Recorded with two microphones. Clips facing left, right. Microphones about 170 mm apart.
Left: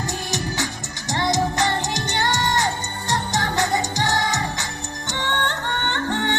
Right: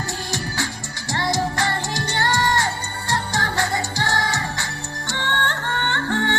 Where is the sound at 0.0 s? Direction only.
20° left (ahead or behind).